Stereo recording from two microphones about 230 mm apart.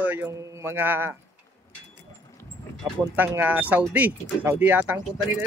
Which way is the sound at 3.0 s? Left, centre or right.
Centre.